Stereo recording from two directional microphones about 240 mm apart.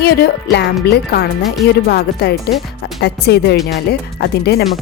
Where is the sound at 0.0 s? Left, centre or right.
Left.